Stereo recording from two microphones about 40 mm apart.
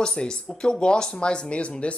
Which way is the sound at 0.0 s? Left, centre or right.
Centre.